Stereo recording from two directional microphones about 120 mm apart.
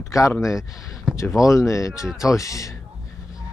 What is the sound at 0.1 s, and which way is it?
A man's voice, 25° left (ahead or behind).